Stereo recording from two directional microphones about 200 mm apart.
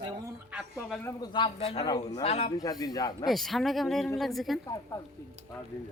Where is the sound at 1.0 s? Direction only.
20° left (ahead or behind).